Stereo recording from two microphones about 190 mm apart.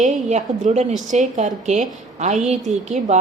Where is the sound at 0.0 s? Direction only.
40° right (ahead or behind).